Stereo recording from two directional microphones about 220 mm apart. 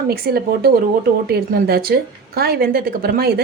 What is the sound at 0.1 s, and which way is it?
Speech, 45° right (ahead or behind).